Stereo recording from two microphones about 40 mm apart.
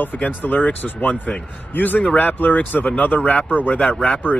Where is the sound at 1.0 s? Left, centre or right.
Left.